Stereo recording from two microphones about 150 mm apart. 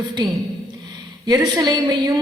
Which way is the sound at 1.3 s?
25° right (ahead or behind).